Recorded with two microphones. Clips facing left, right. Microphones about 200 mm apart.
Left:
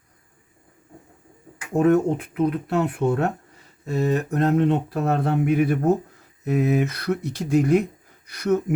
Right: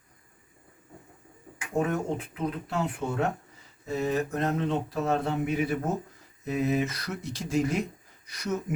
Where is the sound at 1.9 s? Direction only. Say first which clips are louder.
Left 11 dB; 65° left (ahead or behind).